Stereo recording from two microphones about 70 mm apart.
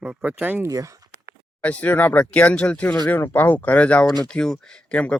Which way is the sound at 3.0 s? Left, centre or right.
Left.